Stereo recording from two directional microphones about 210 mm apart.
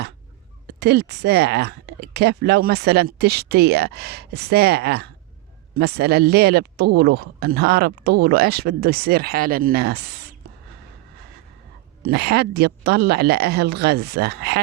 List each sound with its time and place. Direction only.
0.7 s speech: 50° right (ahead or behind)
12.0 s speech: 50° right (ahead or behind)